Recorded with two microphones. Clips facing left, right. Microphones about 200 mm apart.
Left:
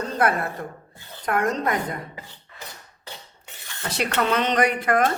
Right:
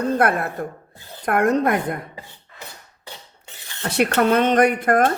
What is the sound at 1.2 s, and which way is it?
Speech, 55° right (ahead or behind).